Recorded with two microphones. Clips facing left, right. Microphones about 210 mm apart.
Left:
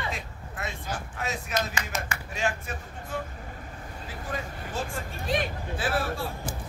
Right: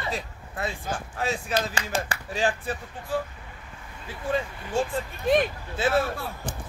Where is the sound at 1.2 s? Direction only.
30° right (ahead or behind).